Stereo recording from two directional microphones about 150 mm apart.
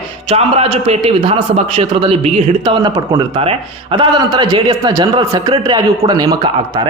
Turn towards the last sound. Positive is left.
turn(degrees=-25)  # may be behind; listen again after turning